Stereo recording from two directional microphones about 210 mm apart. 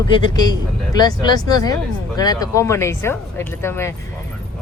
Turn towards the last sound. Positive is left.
turn(degrees=10)  # may be behind; listen again after turning